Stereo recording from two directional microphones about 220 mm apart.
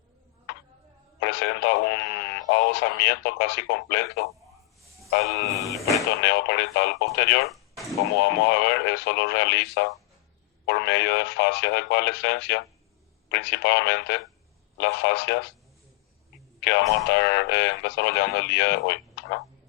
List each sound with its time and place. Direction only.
1.2 s a man's voice: 50° left (ahead or behind)
5.6 s speech: centre (ahead or behind)
6.2 s a man's voice: 50° left (ahead or behind)
16.6 s a man's voice: 50° left (ahead or behind)